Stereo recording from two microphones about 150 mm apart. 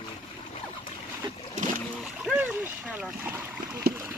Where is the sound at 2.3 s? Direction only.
10° right (ahead or behind).